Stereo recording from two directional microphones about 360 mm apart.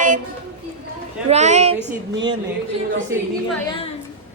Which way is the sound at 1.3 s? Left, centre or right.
Centre.